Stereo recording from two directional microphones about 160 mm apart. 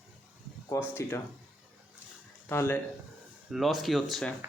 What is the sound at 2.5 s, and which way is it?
Speech, 15° left (ahead or behind).